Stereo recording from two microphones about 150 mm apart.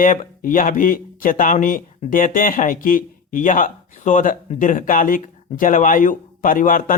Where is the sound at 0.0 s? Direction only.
65° left (ahead or behind).